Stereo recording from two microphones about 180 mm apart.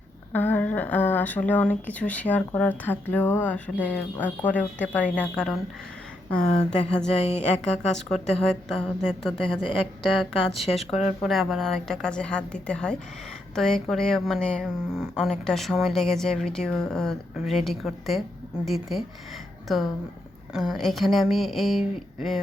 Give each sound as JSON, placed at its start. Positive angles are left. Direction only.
{"t": 0.3, "sound": "speech", "side_deg": 10}
{"t": 6.4, "sound": "a woman's voice", "side_deg": 40}
{"t": 7.9, "sound": "a woman's voice", "side_deg": 5}